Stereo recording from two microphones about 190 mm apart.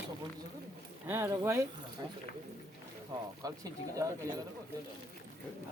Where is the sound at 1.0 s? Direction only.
15° right (ahead or behind).